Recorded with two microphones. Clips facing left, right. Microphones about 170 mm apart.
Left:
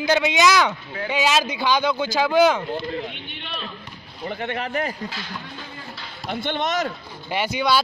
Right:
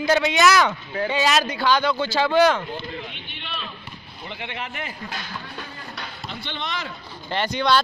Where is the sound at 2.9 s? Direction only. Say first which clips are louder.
Left 5 dB; 40° left (ahead or behind).